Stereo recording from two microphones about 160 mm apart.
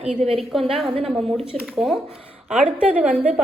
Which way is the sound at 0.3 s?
Centre (ahead or behind).